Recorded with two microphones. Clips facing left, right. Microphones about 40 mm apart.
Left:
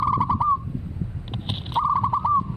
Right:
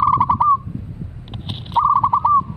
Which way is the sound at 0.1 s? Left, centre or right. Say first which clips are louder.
Right 6 dB; right.